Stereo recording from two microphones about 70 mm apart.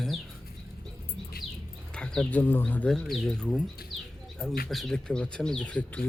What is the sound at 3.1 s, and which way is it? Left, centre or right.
Speech, centre.